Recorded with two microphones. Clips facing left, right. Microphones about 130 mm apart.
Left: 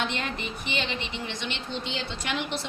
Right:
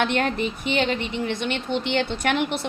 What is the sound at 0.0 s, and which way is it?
A woman's voice, 60° right (ahead or behind).